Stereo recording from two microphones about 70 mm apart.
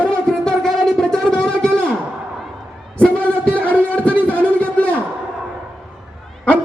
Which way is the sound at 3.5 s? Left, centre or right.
Centre.